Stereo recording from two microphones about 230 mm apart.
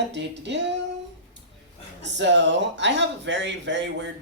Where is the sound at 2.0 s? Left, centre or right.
Right.